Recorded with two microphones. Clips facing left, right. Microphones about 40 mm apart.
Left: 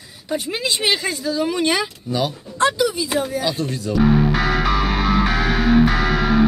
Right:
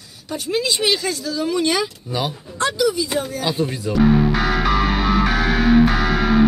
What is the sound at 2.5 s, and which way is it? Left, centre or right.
Speech, left.